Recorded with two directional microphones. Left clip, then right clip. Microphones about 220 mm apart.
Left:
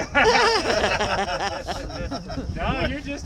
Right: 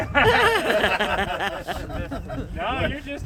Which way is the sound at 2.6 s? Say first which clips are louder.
Right 1 dB; 20° left (ahead or behind).